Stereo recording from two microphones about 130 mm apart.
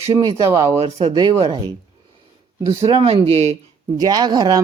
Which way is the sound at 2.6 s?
50° right (ahead or behind).